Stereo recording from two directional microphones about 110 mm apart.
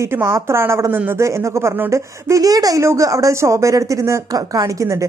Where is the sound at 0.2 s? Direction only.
25° right (ahead or behind).